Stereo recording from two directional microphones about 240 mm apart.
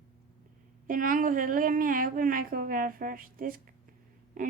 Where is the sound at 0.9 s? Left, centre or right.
Right.